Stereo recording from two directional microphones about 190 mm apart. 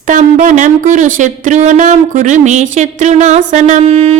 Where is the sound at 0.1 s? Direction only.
40° right (ahead or behind).